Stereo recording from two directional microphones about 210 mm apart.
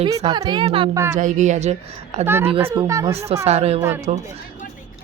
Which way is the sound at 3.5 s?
30° right (ahead or behind).